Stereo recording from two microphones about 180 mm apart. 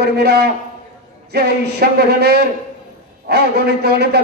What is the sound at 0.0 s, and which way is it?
Speech, 65° right (ahead or behind).